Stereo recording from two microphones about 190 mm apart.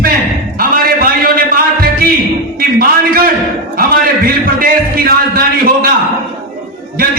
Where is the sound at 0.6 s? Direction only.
50° right (ahead or behind).